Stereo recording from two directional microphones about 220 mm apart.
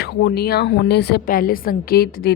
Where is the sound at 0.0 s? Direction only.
45° left (ahead or behind).